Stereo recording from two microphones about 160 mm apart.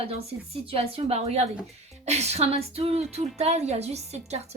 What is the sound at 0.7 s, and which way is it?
Speech, 40° right (ahead or behind).